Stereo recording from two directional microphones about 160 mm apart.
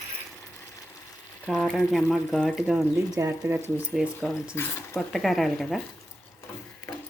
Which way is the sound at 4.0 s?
Centre (ahead or behind).